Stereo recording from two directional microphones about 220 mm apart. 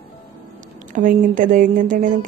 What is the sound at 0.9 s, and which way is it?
Speech, 40° right (ahead or behind).